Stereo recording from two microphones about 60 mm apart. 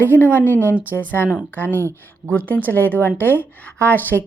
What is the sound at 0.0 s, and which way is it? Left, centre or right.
Speech, left.